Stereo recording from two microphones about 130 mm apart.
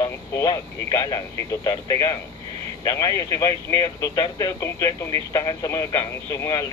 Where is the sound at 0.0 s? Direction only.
30° left (ahead or behind).